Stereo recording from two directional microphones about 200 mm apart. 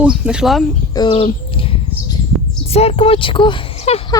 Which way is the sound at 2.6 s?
30° left (ahead or behind).